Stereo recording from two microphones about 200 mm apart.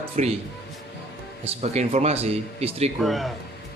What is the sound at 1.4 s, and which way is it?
Speech, 30° right (ahead or behind).